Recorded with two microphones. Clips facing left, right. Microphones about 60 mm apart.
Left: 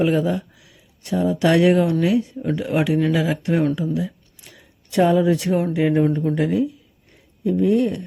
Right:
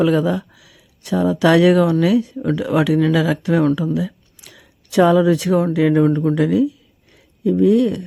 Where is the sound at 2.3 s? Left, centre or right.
Right.